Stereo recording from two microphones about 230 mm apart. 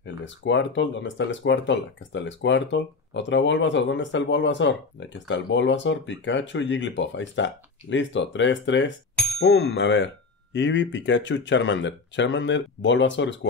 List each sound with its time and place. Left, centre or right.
0.0 s speech: left